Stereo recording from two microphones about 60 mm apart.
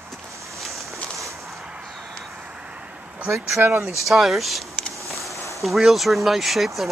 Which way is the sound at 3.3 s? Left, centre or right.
Right.